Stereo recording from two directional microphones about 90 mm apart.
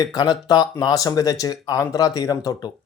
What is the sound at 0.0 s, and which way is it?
A man's voice, 50° left (ahead or behind).